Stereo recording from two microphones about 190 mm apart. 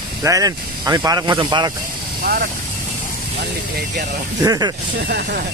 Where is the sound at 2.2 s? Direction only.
50° right (ahead or behind).